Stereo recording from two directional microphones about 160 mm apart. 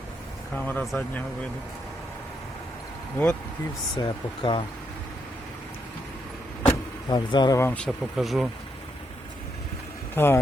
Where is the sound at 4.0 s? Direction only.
30° left (ahead or behind).